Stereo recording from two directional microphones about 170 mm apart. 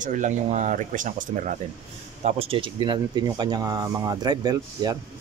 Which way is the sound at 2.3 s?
35° right (ahead or behind).